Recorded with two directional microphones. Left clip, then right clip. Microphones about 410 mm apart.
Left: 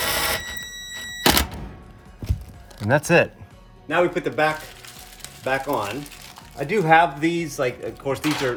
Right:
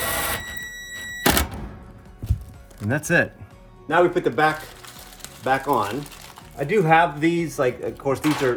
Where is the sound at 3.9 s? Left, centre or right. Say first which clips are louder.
Right 2 dB; centre.